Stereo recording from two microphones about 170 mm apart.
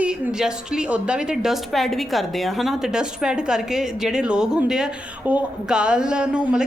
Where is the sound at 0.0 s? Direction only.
5° right (ahead or behind).